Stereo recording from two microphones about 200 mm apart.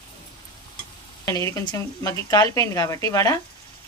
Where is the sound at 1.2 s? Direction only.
15° left (ahead or behind).